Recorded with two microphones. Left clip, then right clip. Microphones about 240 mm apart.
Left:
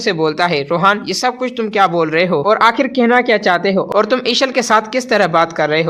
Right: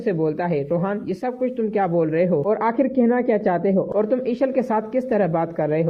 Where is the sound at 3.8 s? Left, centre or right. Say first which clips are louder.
Left 7 dB; left.